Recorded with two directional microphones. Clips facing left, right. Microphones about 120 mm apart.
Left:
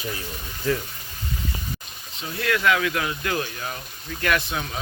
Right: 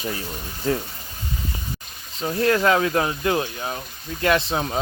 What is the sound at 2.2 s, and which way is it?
Speech, 35° right (ahead or behind).